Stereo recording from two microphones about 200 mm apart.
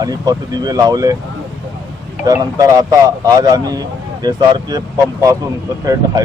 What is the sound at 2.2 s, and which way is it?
A man's voice, 15° right (ahead or behind).